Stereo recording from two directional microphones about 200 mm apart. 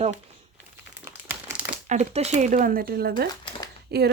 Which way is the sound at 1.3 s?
10° right (ahead or behind).